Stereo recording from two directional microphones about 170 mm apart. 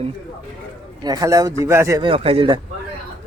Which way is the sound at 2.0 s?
35° right (ahead or behind).